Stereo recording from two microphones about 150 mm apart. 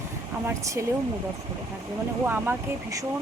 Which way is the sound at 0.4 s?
20° right (ahead or behind).